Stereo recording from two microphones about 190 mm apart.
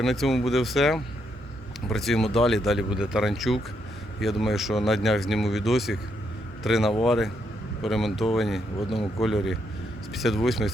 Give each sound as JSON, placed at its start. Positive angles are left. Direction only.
{"t": 0.0, "sound": "speech", "side_deg": 0}